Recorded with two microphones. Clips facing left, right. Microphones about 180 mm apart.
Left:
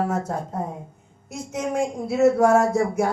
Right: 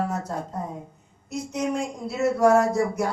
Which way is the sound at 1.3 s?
50° left (ahead or behind).